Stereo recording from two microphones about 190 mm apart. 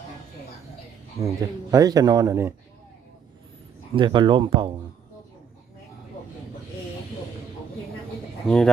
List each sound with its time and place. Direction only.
1.2 s speech: 15° right (ahead or behind)
3.9 s speech: 25° right (ahead or behind)
8.4 s speech: 5° left (ahead or behind)